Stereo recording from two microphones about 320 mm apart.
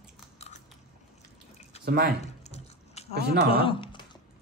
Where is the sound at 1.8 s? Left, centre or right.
Right.